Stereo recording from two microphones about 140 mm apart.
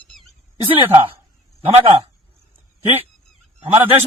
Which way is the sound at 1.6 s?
45° right (ahead or behind).